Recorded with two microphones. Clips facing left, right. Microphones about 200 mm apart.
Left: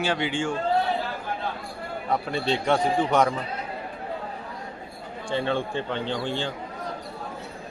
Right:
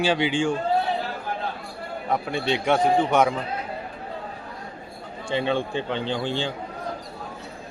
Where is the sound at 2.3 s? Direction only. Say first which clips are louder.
Right 1 dB; 15° right (ahead or behind).